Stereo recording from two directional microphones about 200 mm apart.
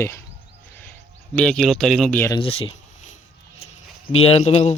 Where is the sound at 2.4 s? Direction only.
25° left (ahead or behind).